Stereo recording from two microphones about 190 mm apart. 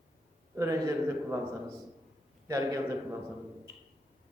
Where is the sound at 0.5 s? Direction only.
15° right (ahead or behind).